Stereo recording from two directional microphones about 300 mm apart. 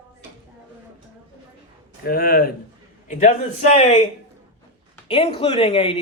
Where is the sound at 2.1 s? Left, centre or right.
Left.